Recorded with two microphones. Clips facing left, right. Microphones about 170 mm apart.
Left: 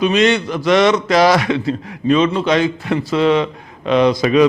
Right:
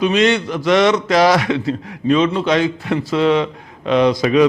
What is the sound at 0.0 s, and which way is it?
A man's voice, 15° left (ahead or behind).